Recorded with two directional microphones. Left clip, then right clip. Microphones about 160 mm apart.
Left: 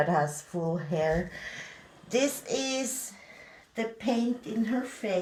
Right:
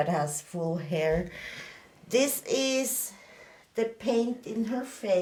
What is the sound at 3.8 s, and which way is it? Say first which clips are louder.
Speech: right 3 dB; 35° right (ahead or behind).